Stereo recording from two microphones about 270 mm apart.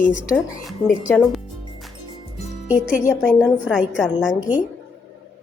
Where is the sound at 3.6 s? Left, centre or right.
Centre.